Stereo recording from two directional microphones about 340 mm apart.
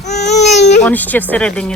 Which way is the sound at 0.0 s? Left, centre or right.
Centre.